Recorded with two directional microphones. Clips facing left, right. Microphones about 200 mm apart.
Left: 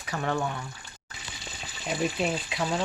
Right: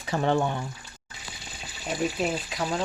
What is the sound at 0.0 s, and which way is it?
Speech, 30° right (ahead or behind).